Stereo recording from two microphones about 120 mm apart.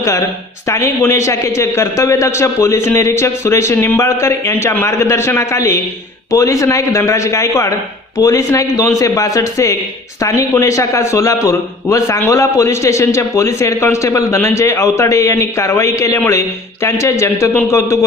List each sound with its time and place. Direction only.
0.0 s a woman's voice: 25° left (ahead or behind)